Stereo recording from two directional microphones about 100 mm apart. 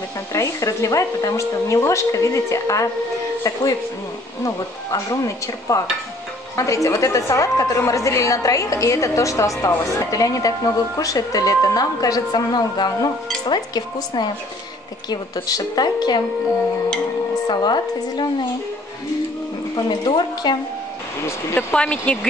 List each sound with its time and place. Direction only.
0.3 s speech: 30° left (ahead or behind)
4.4 s speech: 35° left (ahead or behind)
17.5 s speech: 50° left (ahead or behind)
19.7 s speech: 45° left (ahead or behind)
21.7 s speech: 15° left (ahead or behind)